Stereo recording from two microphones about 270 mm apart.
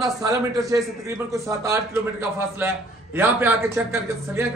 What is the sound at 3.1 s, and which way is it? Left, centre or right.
A man's voice, centre.